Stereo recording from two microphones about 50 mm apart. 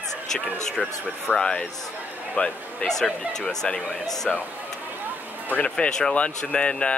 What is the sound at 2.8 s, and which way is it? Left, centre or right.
Speech, centre.